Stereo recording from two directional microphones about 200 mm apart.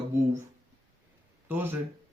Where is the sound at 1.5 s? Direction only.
10° right (ahead or behind).